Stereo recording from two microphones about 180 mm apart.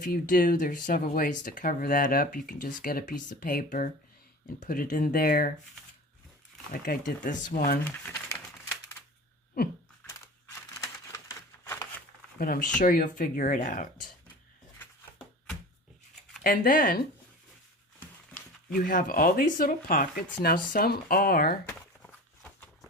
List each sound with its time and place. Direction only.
0.0 s speech: 50° left (ahead or behind)
6.8 s speech: 45° left (ahead or behind)
7.9 s crumpling: 15° left (ahead or behind)
10.1 s a sound: 15° left (ahead or behind)
12.4 s speech: 55° left (ahead or behind)
16.4 s speech: 50° left (ahead or behind)
18.9 s speech: 50° left (ahead or behind)
21.7 s a sound: 10° left (ahead or behind)